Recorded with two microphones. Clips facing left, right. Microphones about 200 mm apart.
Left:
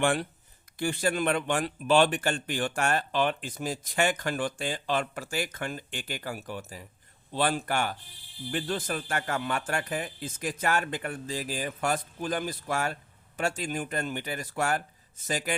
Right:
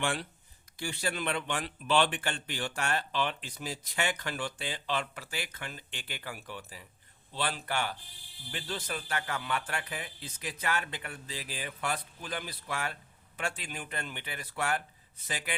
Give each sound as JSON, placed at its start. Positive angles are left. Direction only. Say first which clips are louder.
{"t": 0.0, "sound": "a man's voice", "louder": "left 7 dB", "side_deg": 50}